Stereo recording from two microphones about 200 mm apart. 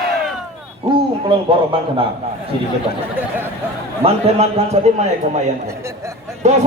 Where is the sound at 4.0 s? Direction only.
30° right (ahead or behind).